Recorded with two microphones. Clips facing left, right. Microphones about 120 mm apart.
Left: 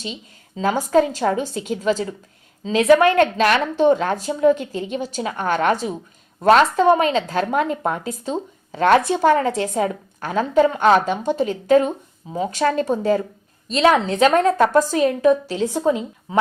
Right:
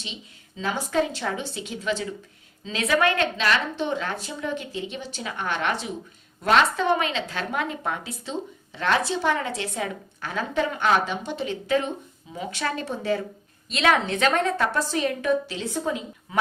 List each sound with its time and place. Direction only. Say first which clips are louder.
0.0 s a woman's voice: left 8 dB; 45° left (ahead or behind)
16.3 s speech: left 6 dB; 30° left (ahead or behind)